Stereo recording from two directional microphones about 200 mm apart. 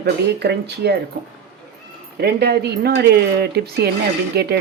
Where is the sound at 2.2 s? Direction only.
50° right (ahead or behind).